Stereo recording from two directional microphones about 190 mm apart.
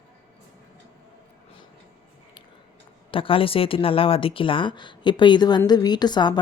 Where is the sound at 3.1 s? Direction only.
30° left (ahead or behind).